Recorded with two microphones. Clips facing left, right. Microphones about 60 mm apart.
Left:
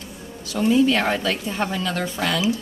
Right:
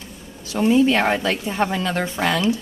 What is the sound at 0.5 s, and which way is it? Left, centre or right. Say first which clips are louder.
Speech: right 1 dB; right.